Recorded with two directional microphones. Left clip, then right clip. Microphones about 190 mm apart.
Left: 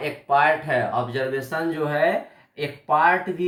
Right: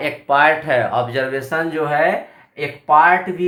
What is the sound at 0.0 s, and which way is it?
Speech, 45° right (ahead or behind).